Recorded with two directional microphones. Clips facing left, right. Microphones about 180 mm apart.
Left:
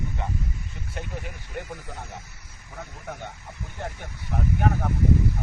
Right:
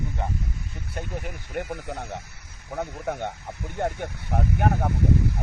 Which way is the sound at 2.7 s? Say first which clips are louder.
Right 9 dB; 60° right (ahead or behind).